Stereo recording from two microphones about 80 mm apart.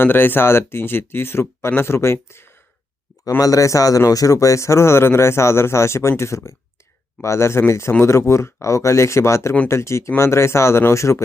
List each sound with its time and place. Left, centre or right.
0.0 s speech: left
3.2 s speech: left